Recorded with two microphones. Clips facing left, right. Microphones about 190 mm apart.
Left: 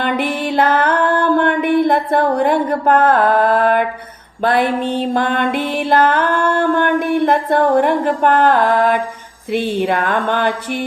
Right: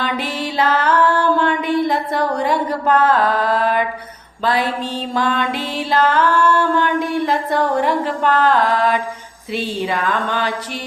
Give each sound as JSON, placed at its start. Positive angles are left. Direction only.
{"t": 0.0, "sound": "music", "side_deg": 55}
{"t": 4.4, "sound": "speech", "side_deg": 55}
{"t": 5.1, "sound": "music", "side_deg": 55}
{"t": 9.5, "sound": "speech", "side_deg": 55}